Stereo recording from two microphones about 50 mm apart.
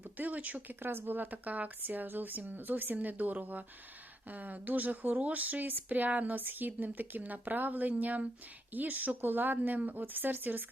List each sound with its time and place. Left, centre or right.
0.0 s speech: right
0.8 s speech: right